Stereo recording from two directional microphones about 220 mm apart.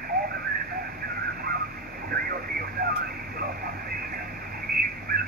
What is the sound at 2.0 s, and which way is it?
Radio, 45° right (ahead or behind).